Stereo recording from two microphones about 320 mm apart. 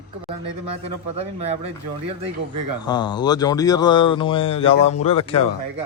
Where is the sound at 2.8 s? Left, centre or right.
Centre.